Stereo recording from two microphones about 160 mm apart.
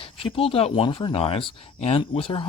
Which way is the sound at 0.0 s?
35° left (ahead or behind).